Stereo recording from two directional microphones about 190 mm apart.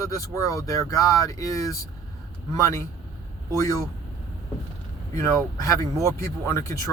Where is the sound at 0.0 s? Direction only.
15° left (ahead or behind).